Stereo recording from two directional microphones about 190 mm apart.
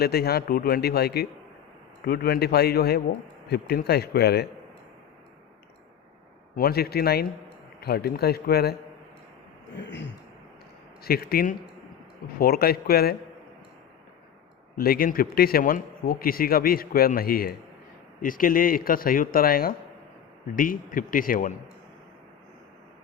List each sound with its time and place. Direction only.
0.0 s speech: 55° left (ahead or behind)
6.6 s speech: 55° left (ahead or behind)
11.0 s a man's voice: 55° left (ahead or behind)
14.8 s a man's voice: 50° left (ahead or behind)